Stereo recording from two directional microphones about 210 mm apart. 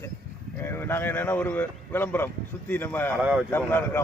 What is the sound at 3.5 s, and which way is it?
Speech, 10° left (ahead or behind).